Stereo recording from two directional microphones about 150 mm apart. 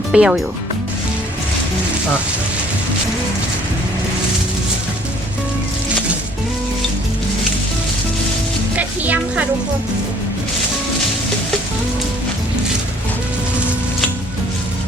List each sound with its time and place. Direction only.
0.1 s speech: 5° right (ahead or behind)
8.7 s music: 10° right (ahead or behind)